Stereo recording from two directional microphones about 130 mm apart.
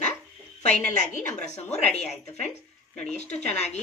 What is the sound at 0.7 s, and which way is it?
A woman's voice, 70° left (ahead or behind).